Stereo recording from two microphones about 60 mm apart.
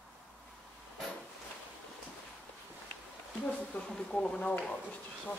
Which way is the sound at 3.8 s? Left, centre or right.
Centre.